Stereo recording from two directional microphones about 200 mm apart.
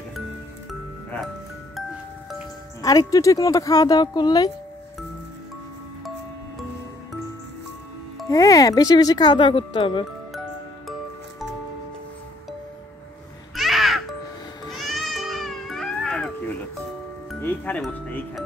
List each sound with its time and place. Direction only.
2.8 s speech: 15° left (ahead or behind)
8.3 s speech: 15° left (ahead or behind)
13.6 s music: centre (ahead or behind)
14.7 s cat: centre (ahead or behind)
17.3 s music: 10° left (ahead or behind)